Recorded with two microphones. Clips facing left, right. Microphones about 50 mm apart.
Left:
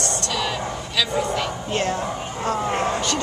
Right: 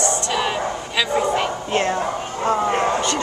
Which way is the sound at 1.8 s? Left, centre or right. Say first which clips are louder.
Right 4 dB; centre.